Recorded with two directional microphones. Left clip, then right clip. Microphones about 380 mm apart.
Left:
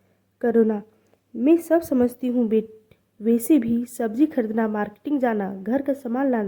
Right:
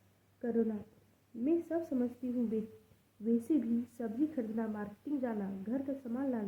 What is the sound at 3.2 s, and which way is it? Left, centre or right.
A woman's voice, left.